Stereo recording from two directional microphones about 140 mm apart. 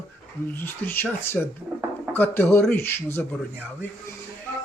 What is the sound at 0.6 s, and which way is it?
Speech, 15° left (ahead or behind).